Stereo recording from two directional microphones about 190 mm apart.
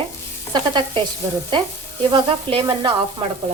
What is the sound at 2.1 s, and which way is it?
Stir, 25° right (ahead or behind).